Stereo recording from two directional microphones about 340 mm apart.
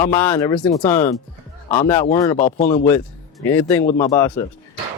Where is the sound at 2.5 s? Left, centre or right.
Centre.